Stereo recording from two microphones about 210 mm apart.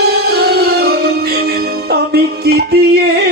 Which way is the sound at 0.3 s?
50° right (ahead or behind).